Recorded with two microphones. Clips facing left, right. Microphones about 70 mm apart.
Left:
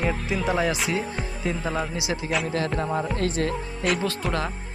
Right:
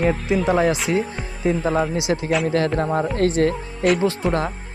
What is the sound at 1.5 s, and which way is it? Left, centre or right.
Music, right.